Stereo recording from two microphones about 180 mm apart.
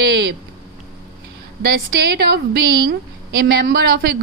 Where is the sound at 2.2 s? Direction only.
65° right (ahead or behind).